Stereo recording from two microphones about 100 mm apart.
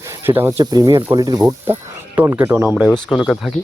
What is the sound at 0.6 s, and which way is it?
Speech, 40° right (ahead or behind).